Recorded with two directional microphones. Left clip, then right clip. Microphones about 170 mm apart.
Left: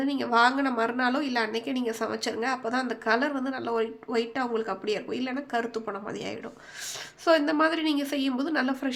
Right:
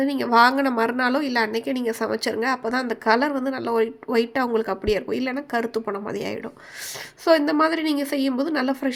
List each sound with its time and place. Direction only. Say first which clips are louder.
0.0 s a woman's voice: right 6 dB; 30° right (ahead or behind)